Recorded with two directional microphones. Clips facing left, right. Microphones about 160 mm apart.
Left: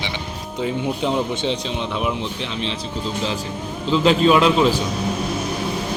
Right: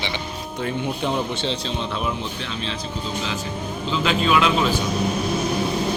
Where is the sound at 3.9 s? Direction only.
35° left (ahead or behind).